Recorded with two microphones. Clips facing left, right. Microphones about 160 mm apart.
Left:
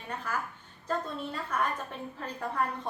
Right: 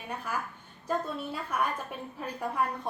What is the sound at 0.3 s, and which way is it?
A woman's voice, 10° right (ahead or behind).